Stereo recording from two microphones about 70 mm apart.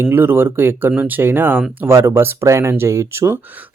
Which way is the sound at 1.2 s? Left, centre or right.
Right.